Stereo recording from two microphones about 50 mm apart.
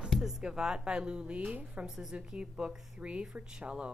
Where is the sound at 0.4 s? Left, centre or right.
Centre.